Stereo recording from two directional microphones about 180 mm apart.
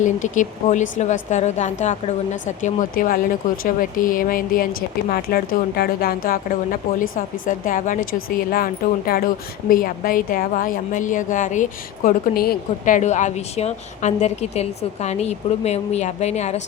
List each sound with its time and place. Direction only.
0.0 s a woman's voice: 45° left (ahead or behind)